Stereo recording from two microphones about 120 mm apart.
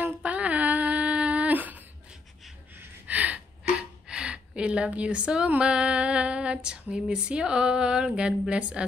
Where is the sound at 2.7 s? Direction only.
15° right (ahead or behind).